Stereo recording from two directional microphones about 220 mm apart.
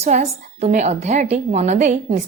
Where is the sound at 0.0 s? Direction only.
30° right (ahead or behind).